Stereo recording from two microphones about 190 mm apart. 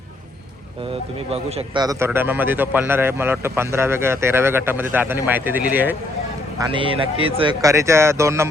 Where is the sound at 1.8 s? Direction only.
15° right (ahead or behind).